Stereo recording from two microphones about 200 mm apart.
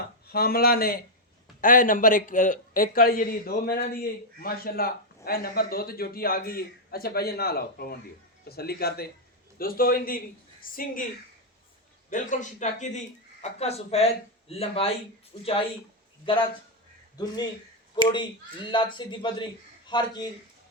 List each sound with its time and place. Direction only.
0.3 s a man's voice: 50° left (ahead or behind)
12.1 s speech: 40° left (ahead or behind)
17.9 s speech: 25° left (ahead or behind)